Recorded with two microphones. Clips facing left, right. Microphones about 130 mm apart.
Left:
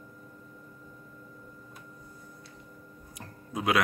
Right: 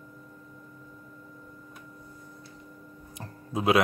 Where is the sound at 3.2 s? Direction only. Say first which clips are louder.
Right 4 dB; 25° right (ahead or behind).